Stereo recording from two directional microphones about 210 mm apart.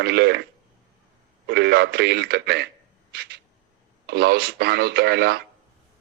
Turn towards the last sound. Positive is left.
turn(degrees=-50)  # may be behind; listen again after turning